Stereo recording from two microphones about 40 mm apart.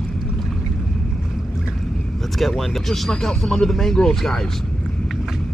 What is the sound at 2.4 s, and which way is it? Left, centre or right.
Speech, centre.